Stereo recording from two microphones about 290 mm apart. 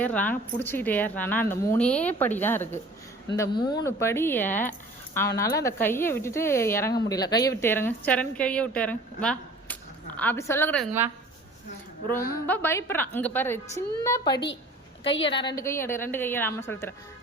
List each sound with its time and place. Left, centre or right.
0.0 s a woman's voice: centre
12.0 s a woman's voice: centre
15.0 s a woman's voice: left
15.4 s a woman's voice: centre